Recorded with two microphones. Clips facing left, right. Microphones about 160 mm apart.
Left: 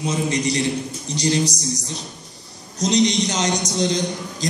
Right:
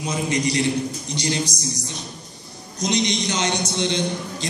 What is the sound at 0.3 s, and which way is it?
A man's voice, 35° left (ahead or behind).